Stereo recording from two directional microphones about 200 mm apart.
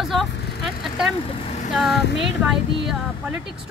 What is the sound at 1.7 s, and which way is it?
A woman's voice, centre (ahead or behind).